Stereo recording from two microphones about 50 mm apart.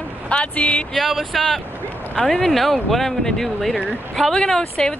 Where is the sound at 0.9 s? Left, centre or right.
Centre.